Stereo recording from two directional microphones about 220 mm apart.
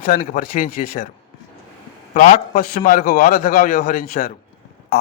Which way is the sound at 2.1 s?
35° left (ahead or behind).